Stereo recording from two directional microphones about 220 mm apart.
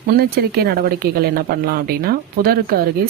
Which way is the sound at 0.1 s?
45° right (ahead or behind).